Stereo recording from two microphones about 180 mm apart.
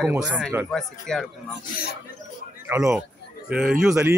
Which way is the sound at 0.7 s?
Centre (ahead or behind).